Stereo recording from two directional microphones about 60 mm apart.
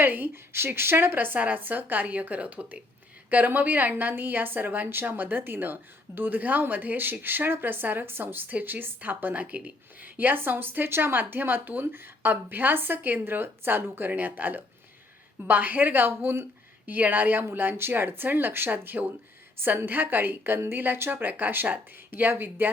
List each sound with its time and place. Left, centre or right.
0.0 s a woman's voice: right